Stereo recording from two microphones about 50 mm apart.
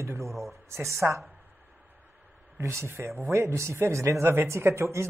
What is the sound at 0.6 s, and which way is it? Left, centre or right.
Speech, right.